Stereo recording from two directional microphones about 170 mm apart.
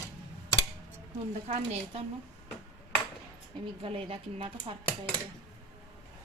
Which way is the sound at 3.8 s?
35° right (ahead or behind).